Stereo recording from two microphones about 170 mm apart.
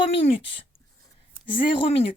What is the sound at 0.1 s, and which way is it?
Speech, 35° left (ahead or behind).